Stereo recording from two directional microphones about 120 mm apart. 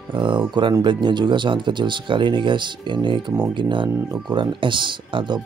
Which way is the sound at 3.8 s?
25° right (ahead or behind).